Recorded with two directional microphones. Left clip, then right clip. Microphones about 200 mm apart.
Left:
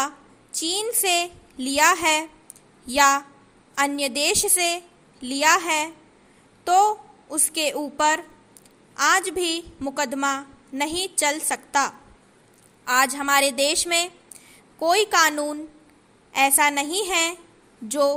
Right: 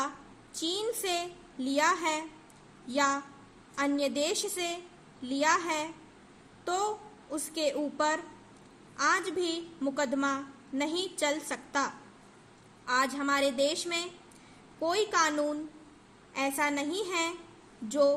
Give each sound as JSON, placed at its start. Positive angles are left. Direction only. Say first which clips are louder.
{"t": 0.7, "sound": "a woman's voice", "louder": "left 9 dB", "side_deg": 40}